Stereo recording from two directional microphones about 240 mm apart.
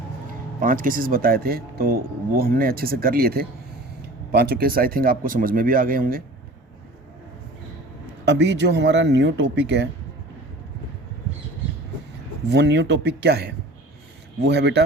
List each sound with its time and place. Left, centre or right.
0.6 s speech: right
8.2 s speech: right
12.5 s speech: right